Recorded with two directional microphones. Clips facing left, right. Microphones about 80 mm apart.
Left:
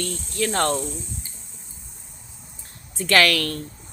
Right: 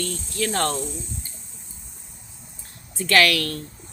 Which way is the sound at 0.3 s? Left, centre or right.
Left.